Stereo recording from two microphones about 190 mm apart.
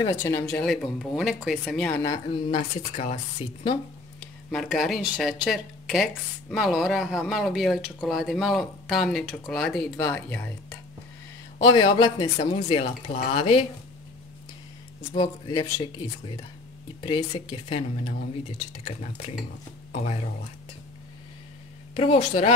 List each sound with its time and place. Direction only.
0.0 s speech: 15° left (ahead or behind)
2.2 s speech: 30° left (ahead or behind)
4.5 s speech: centre (ahead or behind)
11.5 s speech: 25° left (ahead or behind)
15.1 s speech: 25° left (ahead or behind)
17.0 s speech: 25° left (ahead or behind)
21.9 s speech: 30° left (ahead or behind)